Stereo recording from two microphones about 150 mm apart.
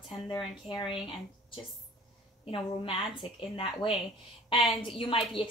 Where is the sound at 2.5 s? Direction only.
35° left (ahead or behind).